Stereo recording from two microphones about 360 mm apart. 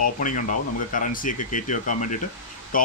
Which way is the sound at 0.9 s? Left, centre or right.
Left.